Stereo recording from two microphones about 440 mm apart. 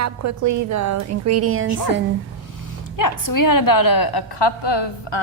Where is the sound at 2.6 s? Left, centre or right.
Left.